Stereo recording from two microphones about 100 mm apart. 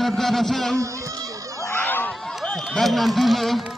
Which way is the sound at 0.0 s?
Centre (ahead or behind).